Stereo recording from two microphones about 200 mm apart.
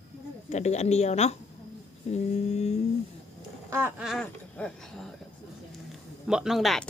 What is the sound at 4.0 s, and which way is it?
Speech, centre (ahead or behind).